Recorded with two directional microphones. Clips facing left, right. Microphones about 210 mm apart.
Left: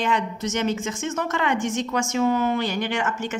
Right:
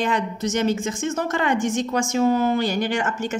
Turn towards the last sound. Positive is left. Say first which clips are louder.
# right 2 dB
turn(degrees=-35)  # may be behind; listen again after turning